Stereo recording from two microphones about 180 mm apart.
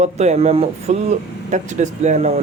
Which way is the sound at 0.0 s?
40° right (ahead or behind).